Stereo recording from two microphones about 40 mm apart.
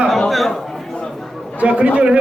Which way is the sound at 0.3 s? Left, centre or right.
Centre.